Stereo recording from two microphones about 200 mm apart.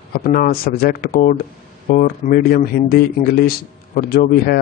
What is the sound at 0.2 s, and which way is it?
Speech, 45° left (ahead or behind).